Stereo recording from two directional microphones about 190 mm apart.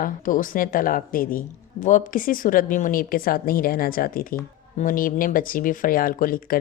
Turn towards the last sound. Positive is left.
turn(degrees=50)  # may be behind; listen again after turning